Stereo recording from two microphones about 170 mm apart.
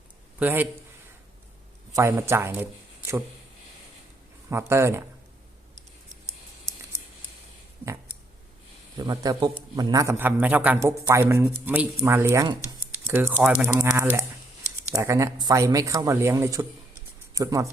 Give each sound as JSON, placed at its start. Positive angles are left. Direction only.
{"t": 0.3, "sound": "a man's voice", "side_deg": -10}
{"t": 1.9, "sound": "a man's voice", "side_deg": -15}
{"t": 4.4, "sound": "a man's voice", "side_deg": -15}
{"t": 9.0, "sound": "a man's voice", "side_deg": -20}